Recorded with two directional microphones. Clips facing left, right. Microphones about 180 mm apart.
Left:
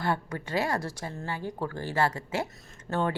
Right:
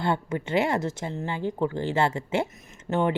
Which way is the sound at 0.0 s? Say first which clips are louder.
Right 4 dB; 25° right (ahead or behind).